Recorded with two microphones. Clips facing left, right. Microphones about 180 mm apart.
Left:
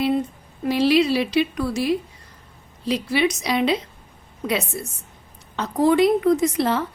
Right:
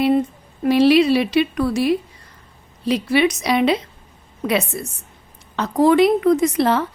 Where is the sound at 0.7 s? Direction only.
65° right (ahead or behind).